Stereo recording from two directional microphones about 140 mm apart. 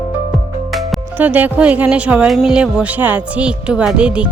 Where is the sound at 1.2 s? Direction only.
10° right (ahead or behind).